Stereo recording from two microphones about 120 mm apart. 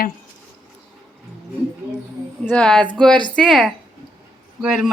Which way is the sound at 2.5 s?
10° left (ahead or behind).